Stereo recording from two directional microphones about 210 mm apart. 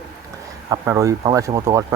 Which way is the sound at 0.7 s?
15° right (ahead or behind).